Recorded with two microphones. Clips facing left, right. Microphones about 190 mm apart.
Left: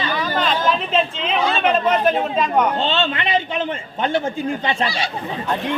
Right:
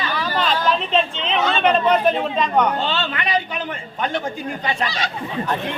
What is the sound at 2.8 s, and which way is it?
Speech, 25° left (ahead or behind).